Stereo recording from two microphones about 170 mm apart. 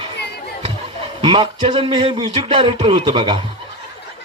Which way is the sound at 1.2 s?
30° right (ahead or behind).